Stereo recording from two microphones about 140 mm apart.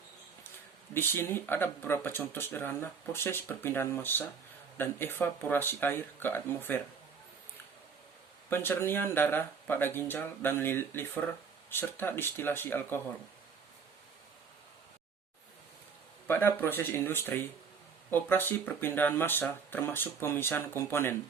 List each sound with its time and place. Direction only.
0.9 s speech: 15° left (ahead or behind)
8.4 s speech: 15° left (ahead or behind)
16.2 s speech: 15° left (ahead or behind)